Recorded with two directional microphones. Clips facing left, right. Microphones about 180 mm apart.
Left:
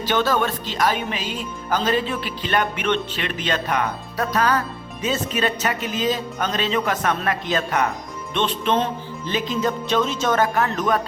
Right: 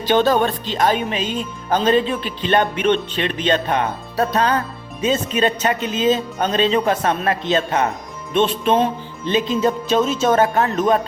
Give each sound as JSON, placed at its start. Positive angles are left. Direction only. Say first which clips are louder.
{"t": 0.0, "sound": "speech", "louder": "right 5 dB", "side_deg": -20}
{"t": 8.6, "sound": "music", "louder": "right 4 dB", "side_deg": -15}
{"t": 9.3, "sound": "speech", "louder": "right 5 dB", "side_deg": -25}